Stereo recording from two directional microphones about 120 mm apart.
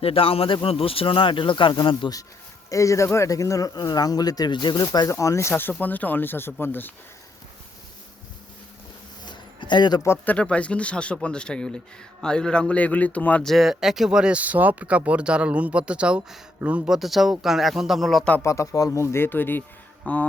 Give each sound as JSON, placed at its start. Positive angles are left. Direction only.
{"t": 0.0, "sound": "speech", "side_deg": 50}
{"t": 2.6, "sound": "speech", "side_deg": 25}
{"t": 4.9, "sound": "speech", "side_deg": 25}
{"t": 9.2, "sound": "a sound", "side_deg": 40}
{"t": 10.0, "sound": "speech", "side_deg": 20}
{"t": 10.3, "sound": "speech", "side_deg": 10}
{"t": 13.5, "sound": "speech", "side_deg": 0}
{"t": 18.3, "sound": "speech", "side_deg": 25}